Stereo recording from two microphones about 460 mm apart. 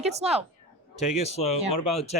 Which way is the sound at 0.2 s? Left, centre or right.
Centre.